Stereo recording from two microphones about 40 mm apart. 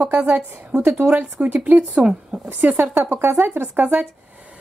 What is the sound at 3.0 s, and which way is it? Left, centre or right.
Speech, right.